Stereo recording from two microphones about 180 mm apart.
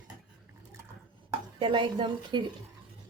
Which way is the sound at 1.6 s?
25° right (ahead or behind).